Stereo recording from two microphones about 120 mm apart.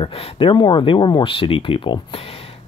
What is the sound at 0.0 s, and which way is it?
Speech, 55° left (ahead or behind).